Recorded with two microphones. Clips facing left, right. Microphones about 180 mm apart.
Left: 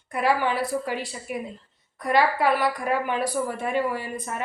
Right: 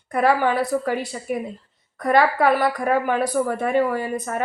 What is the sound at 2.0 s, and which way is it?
A woman's voice, 50° right (ahead or behind).